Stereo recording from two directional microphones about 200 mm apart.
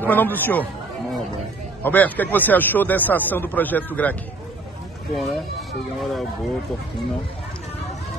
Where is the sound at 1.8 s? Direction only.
10° left (ahead or behind).